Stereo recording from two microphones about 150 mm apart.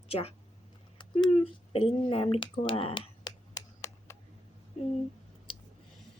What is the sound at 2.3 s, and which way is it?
Speech, 40° left (ahead or behind).